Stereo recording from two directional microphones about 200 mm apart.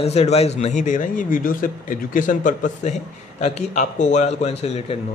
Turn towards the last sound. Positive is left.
turn(degrees=30)  # may be behind; listen again after turning